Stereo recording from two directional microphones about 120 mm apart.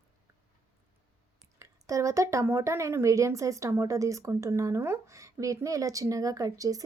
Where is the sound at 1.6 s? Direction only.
25° right (ahead or behind).